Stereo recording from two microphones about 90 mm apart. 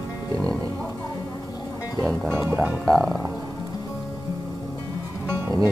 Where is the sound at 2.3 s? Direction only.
25° right (ahead or behind).